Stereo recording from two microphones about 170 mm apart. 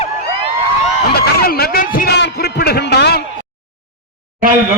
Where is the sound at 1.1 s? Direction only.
65° left (ahead or behind).